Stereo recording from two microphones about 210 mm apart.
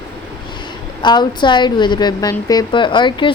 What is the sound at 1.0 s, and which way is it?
A woman's voice, 20° left (ahead or behind).